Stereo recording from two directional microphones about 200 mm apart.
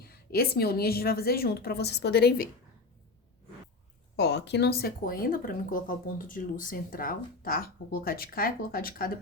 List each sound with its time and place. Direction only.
0.0 s speech: 50° left (ahead or behind)
4.2 s speech: 60° left (ahead or behind)